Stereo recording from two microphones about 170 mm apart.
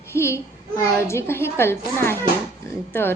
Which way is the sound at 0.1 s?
15° left (ahead or behind).